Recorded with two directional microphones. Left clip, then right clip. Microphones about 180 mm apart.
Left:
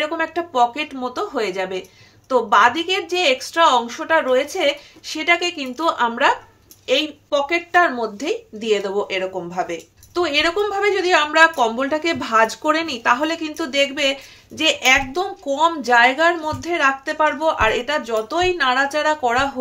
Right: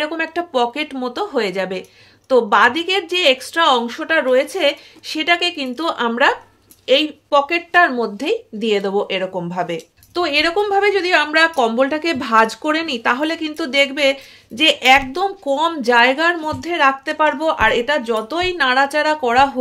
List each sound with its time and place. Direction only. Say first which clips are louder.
0.0 s speech: right 1 dB; 50° right (ahead or behind)